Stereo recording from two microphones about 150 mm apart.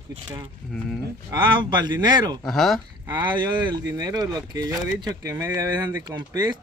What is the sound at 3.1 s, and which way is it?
Speech, 30° right (ahead or behind).